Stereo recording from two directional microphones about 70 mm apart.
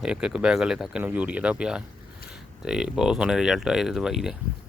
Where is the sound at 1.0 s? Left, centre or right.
Right.